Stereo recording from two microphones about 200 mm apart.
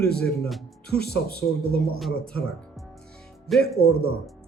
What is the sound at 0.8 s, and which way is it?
Speech, 55° left (ahead or behind).